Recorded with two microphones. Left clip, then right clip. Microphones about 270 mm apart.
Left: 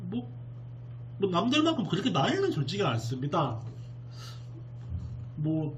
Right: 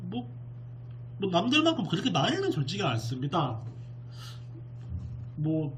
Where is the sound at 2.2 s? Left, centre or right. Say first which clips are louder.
Even; centre.